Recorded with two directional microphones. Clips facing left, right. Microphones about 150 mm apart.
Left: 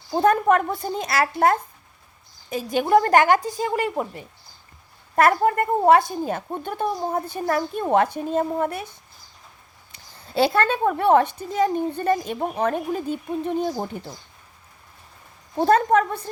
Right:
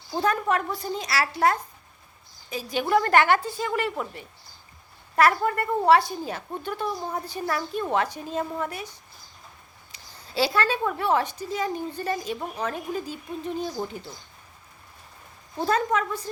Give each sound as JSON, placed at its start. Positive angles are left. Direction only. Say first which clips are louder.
{"t": 0.2, "sound": "a woman's voice", "louder": "left 6 dB", "side_deg": 50}
{"t": 15.6, "sound": "a woman's voice", "louder": "left 7 dB", "side_deg": 50}